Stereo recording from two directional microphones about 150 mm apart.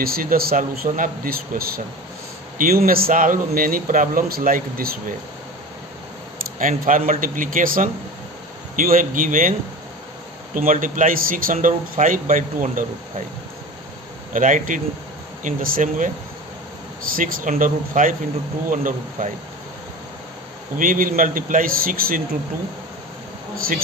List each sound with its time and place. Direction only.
0.0 s speech: 80° right
6.6 s speech: 60° right (ahead or behind)
14.3 s speech: 60° right (ahead or behind)
17.1 s speech: 65° right (ahead or behind)
20.7 s speech: 65° right (ahead or behind)
23.5 s speech: 75° right (ahead or behind)